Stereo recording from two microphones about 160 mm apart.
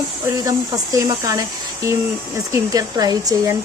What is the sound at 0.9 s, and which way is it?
Speech, 20° right (ahead or behind).